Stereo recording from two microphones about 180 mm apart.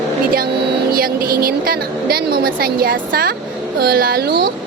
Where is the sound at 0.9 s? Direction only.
55° right (ahead or behind).